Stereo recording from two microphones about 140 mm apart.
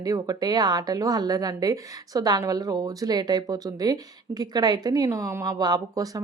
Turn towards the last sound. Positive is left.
turn(degrees=-30)  # may be behind; listen again after turning